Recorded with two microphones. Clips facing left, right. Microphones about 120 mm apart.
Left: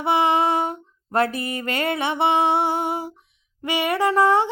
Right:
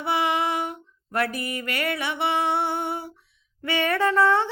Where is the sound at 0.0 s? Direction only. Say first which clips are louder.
Left 5 dB; 25° left (ahead or behind).